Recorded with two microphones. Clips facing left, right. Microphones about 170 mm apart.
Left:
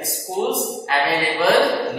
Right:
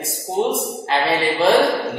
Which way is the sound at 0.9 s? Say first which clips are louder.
Right 2 dB; 25° right (ahead or behind).